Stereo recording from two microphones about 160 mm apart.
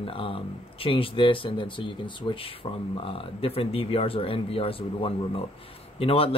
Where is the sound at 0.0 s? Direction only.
35° left (ahead or behind).